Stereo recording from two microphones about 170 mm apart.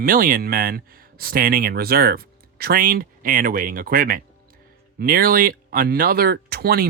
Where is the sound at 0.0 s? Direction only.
55° right (ahead or behind).